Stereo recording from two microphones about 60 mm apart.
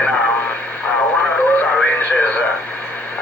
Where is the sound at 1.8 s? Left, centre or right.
Left.